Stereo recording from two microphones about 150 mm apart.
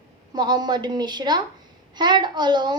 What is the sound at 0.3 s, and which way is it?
A woman's voice, 30° right (ahead or behind).